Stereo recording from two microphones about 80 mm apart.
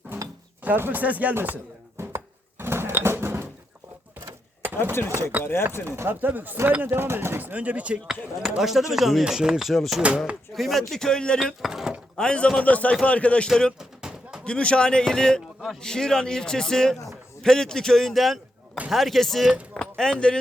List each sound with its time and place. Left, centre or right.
0.6 s speech: right
2.0 s a sound: right
5.0 s speech: right
5.4 s chopping: left
5.8 s speech: right
8.4 s speech: centre
11.6 s speech: centre
12.1 s speech: centre
13.7 s a sound: centre
14.4 s a man's voice: centre
19.7 s a sound: centre